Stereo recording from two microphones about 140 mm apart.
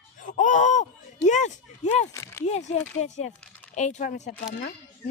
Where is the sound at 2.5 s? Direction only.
55° left (ahead or behind).